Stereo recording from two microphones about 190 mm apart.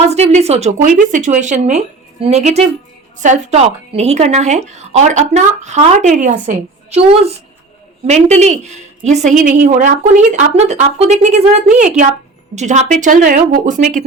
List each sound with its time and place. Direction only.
0.1 s a woman's voice: 35° right (ahead or behind)